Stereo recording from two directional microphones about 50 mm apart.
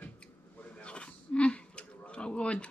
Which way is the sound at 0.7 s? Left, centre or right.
Left.